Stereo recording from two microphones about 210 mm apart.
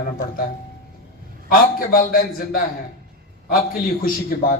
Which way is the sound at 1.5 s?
45° left (ahead or behind).